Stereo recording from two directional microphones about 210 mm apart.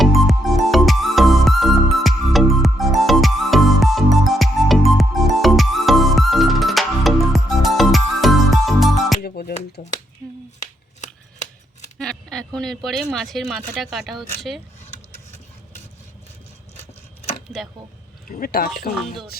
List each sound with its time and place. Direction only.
0.0 s music: centre (ahead or behind)
9.2 s music: 45° left (ahead or behind)
11.9 s a sound: centre (ahead or behind)
12.5 s speech: centre (ahead or behind)
18.3 s speech: 45° left (ahead or behind)